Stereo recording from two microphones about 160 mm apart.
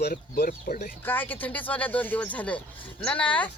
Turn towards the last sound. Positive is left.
turn(degrees=10)  # may be behind; listen again after turning